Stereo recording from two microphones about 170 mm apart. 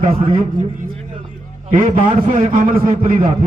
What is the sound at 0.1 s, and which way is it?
Speech, 30° right (ahead or behind).